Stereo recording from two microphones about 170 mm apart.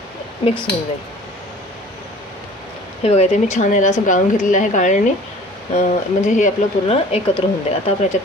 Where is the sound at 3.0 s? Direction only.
40° left (ahead or behind).